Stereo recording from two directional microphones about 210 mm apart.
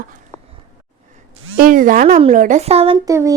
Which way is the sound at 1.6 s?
40° right (ahead or behind).